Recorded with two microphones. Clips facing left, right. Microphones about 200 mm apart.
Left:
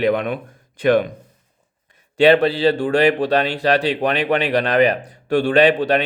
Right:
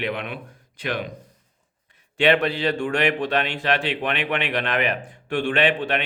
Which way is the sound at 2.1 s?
35° left (ahead or behind).